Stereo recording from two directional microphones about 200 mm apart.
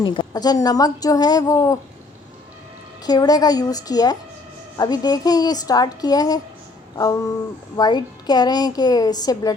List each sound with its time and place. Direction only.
0.0 s a woman's voice: 20° left (ahead or behind)
3.0 s a woman's voice: 20° left (ahead or behind)
6.9 s a sound: 15° left (ahead or behind)
7.8 s a woman's voice: 20° left (ahead or behind)